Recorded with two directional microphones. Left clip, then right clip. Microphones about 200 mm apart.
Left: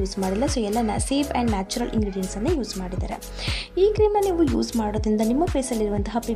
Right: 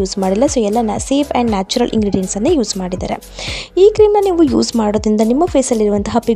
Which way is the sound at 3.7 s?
35° right (ahead or behind).